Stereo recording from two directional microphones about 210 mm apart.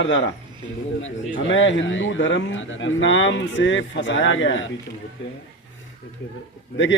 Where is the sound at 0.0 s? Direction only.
60° left (ahead or behind).